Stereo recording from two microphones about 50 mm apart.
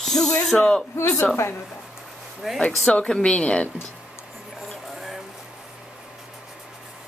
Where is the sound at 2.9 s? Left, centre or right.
Left.